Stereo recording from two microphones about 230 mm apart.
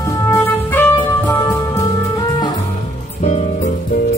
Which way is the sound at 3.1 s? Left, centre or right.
Left.